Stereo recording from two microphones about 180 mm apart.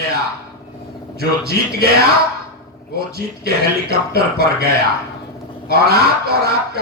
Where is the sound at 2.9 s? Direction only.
60° right (ahead or behind).